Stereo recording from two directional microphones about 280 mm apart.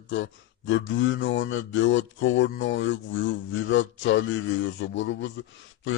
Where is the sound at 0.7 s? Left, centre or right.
Left.